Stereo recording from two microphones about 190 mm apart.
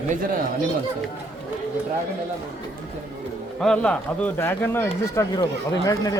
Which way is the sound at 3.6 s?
5° left (ahead or behind).